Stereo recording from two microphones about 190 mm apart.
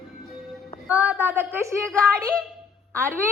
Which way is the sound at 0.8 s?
10° right (ahead or behind).